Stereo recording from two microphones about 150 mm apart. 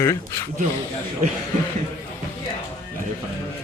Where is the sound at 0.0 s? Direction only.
20° left (ahead or behind).